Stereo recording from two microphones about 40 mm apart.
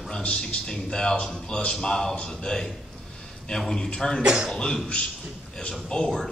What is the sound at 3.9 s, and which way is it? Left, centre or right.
Speech, centre.